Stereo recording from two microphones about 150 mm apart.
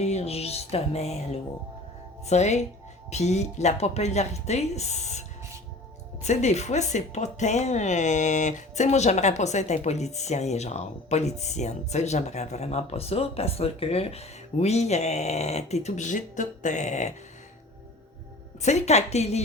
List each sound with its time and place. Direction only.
0.0 s speech: 45° left (ahead or behind)
6.2 s speech: 50° left (ahead or behind)
18.6 s speech: 50° left (ahead or behind)